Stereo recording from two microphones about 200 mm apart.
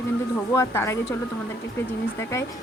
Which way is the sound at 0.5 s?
15° left (ahead or behind).